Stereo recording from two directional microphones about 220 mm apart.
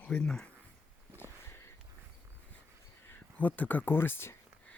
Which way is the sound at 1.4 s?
10° left (ahead or behind).